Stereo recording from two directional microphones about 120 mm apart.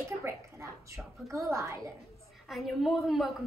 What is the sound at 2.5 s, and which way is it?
Speech, centre (ahead or behind).